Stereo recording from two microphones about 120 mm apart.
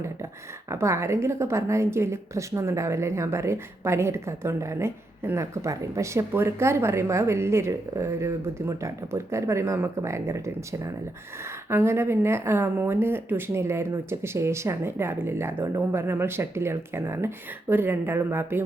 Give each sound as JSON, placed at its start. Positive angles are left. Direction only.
{"t": 0.7, "sound": "a woman's voice", "side_deg": -25}